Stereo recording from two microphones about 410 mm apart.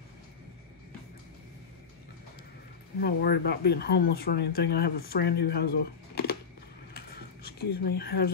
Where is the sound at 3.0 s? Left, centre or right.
Left.